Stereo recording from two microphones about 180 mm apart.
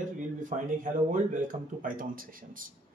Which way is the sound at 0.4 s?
45° right (ahead or behind).